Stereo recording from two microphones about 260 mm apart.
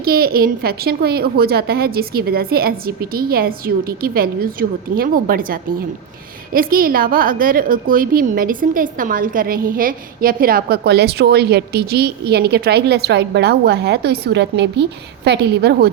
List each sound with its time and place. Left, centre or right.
0.0 s a woman's voice: right